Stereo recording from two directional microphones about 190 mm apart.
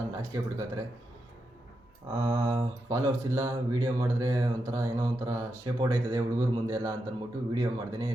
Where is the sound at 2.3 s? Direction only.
20° right (ahead or behind).